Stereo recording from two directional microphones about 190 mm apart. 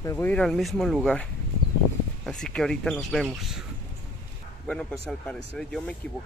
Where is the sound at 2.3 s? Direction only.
5° left (ahead or behind).